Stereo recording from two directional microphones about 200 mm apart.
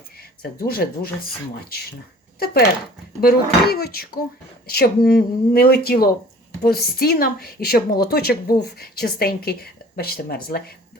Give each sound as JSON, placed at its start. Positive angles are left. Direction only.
{"t": 0.2, "sound": "speech", "side_deg": 50}
{"t": 2.4, "sound": "a woman's voice", "side_deg": 50}